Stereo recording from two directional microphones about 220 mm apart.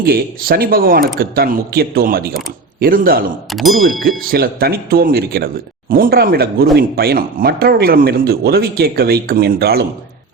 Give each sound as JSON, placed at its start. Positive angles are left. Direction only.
{"t": 0.0, "sound": "a man's voice", "side_deg": -45}
{"t": 3.5, "sound": "speech", "side_deg": 0}
{"t": 4.2, "sound": "speech", "side_deg": -45}